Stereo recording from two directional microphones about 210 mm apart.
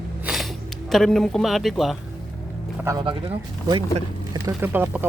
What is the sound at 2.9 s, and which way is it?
Speech, 25° right (ahead or behind).